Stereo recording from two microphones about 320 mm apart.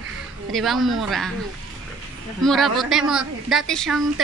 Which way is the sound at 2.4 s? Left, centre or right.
Centre.